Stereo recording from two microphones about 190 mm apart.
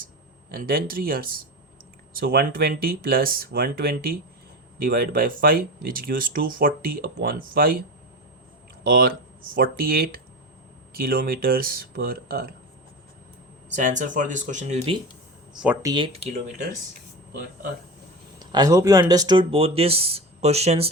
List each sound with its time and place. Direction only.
0.5 s speech: 50° right (ahead or behind)
8.8 s speech: 50° right (ahead or behind)
13.7 s speech: 40° right (ahead or behind)
15.5 s speech: 5° right (ahead or behind)
15.8 s speech: 20° right (ahead or behind)
16.1 s speech: 35° right (ahead or behind)
18.3 s speech: 20° right (ahead or behind)